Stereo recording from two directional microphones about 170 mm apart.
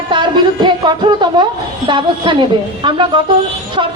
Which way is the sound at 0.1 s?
25° right (ahead or behind).